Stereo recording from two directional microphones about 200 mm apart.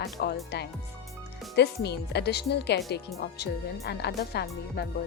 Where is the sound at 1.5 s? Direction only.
55° left (ahead or behind).